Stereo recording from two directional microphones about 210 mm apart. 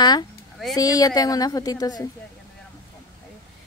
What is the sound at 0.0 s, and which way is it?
A woman's voice, 20° left (ahead or behind).